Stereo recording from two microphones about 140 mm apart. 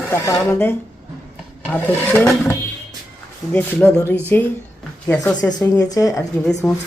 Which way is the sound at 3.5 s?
10° left (ahead or behind).